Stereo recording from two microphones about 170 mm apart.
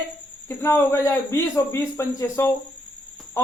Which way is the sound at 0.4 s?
15° left (ahead or behind).